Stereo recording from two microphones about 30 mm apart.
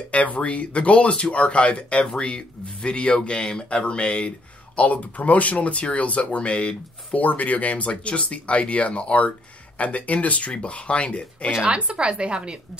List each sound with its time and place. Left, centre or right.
0.1 s speech: left
2.1 s speech: left
4.7 s speech: left
7.2 s speech: left
10.5 s speech: left
11.6 s a woman's voice: right